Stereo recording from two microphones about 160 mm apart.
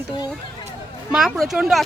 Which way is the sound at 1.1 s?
Centre (ahead or behind).